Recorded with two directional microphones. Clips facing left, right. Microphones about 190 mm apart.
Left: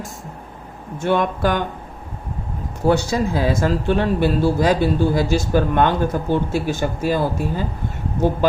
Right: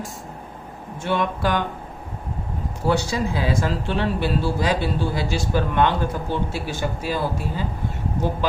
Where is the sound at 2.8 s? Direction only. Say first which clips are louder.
Left 4 dB; 45° left (ahead or behind).